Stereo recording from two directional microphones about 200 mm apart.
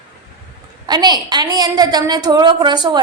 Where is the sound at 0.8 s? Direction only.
20° right (ahead or behind).